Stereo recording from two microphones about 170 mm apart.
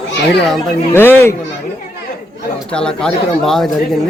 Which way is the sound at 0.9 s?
10° left (ahead or behind).